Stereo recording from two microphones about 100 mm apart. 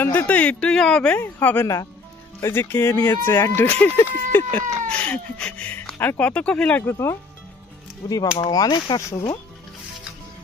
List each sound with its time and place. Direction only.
0.0 s speech: 20° left (ahead or behind)
1.2 s speech: 20° left (ahead or behind)
6.8 s speech: 25° left (ahead or behind)
8.0 s speech: 40° left (ahead or behind)